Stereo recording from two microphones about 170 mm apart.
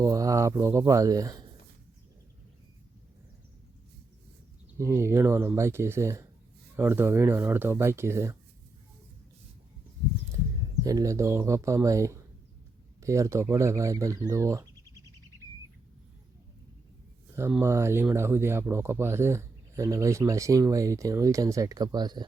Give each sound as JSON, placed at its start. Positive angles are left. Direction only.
{"t": 0.0, "sound": "speech", "side_deg": -20}
{"t": 4.8, "sound": "speech", "side_deg": -15}
{"t": 10.8, "sound": "speech", "side_deg": -20}
{"t": 17.6, "sound": "speech", "side_deg": -15}